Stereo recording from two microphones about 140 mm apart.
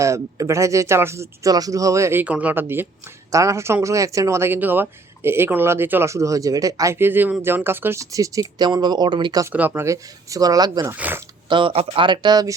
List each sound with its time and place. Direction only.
0.0 s speech: 20° right (ahead or behind)
9.5 s speech: 15° right (ahead or behind)
10.9 s speech: 10° right (ahead or behind)
11.4 s speech: 35° right (ahead or behind)